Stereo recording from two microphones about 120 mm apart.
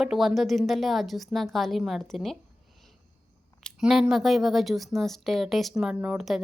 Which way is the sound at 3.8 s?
5° right (ahead or behind).